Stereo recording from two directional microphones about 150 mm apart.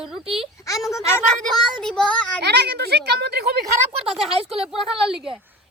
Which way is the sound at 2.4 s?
90° right.